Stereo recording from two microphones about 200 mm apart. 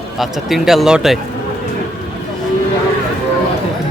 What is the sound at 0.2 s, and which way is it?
Speech, centre (ahead or behind).